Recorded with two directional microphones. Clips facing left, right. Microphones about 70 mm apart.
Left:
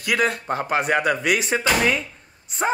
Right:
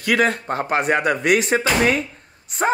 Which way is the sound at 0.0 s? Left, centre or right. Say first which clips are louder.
Right 3 dB; right.